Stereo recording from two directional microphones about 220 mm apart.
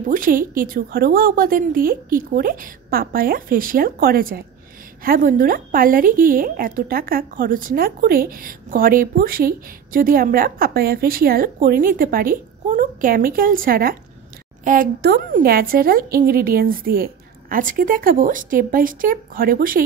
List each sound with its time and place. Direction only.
0.1 s a woman's voice: 40° right (ahead or behind)